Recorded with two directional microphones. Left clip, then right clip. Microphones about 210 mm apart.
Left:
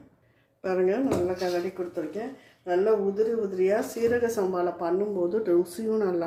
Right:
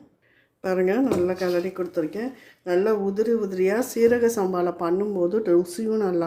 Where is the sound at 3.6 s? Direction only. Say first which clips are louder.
Right 4 dB; 50° right (ahead or behind).